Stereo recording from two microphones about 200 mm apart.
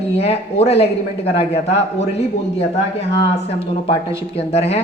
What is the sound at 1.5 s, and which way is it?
Speech, 55° left (ahead or behind).